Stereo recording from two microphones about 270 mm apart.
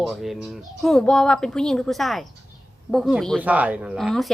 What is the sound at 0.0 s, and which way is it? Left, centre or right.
A woman's voice, centre.